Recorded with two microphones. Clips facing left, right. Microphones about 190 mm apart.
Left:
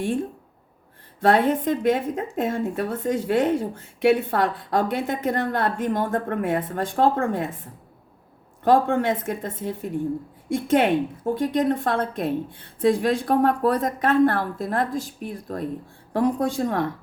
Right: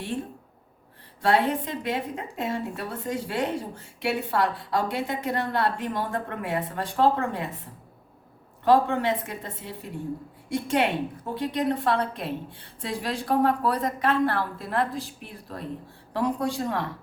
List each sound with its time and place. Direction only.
1.2 s a woman's voice: 50° left (ahead or behind)
8.6 s a woman's voice: 50° left (ahead or behind)